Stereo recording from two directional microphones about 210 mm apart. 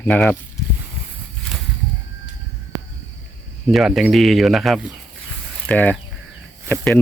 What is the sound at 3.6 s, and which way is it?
Speech, centre (ahead or behind).